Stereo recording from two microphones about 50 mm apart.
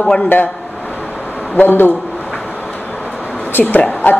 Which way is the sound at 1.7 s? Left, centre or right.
Left.